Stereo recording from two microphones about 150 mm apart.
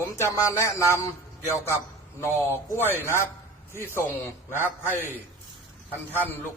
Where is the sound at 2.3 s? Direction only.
15° right (ahead or behind).